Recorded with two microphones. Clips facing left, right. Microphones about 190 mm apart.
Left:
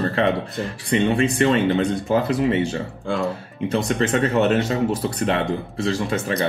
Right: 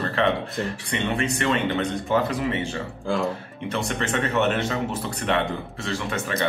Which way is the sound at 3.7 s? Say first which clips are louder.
Left 6 dB; 35° left (ahead or behind).